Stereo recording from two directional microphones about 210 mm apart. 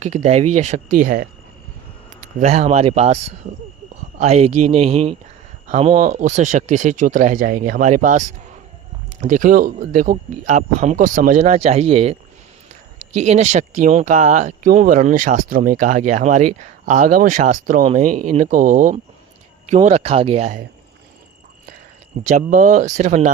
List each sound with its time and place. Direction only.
0.0 s speech: 35° right (ahead or behind)
2.4 s speech: 35° right (ahead or behind)
13.1 s speech: 30° right (ahead or behind)
22.3 s speech: 40° right (ahead or behind)